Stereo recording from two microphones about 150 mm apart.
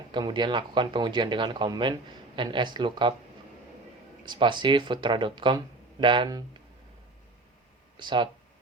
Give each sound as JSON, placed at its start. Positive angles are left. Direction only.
{"t": 0.1, "sound": "speech", "side_deg": -30}
{"t": 4.3, "sound": "speech", "side_deg": -30}
{"t": 7.9, "sound": "speech", "side_deg": -30}